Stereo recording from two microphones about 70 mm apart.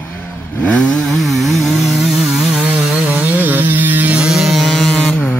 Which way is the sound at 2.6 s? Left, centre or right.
Centre.